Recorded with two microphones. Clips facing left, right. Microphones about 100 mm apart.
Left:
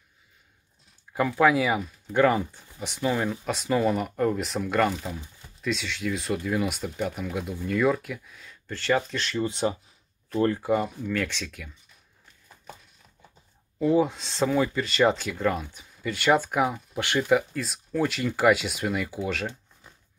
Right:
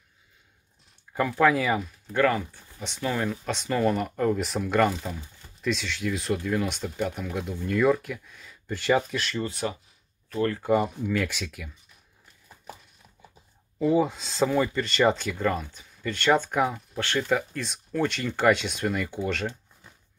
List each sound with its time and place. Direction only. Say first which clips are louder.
1.1 s speech: left 1 dB; 5° left (ahead or behind)
2.1 s speech: left 2 dB; 15° left (ahead or behind); by 8.5 s centre (ahead or behind)
8.6 s speech: right 1 dB; 15° right (ahead or behind)
9.4 s speech: left 4 dB; 20° left (ahead or behind)
10.6 s speech: right 2 dB; centre (ahead or behind)
13.7 s speech: left 1 dB; centre (ahead or behind)